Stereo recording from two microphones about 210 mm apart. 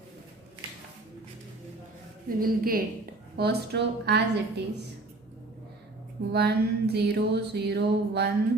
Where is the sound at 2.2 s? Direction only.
45° right (ahead or behind).